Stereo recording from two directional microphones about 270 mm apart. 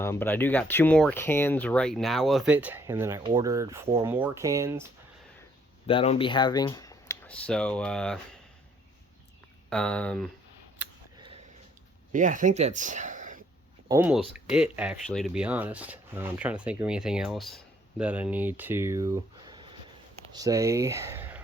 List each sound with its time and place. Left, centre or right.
0.0 s speech: centre
5.8 s speech: left; by 8.2 s centre
9.6 s speech: centre
10.8 s scissors: centre
12.1 s speech: right
13.8 s speech: centre